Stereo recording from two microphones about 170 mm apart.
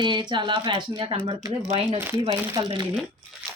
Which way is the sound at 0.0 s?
25° right (ahead or behind).